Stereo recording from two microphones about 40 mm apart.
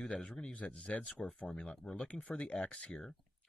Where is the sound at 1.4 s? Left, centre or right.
Left.